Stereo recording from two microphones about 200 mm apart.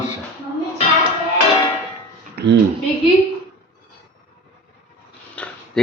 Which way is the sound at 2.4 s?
50° right (ahead or behind).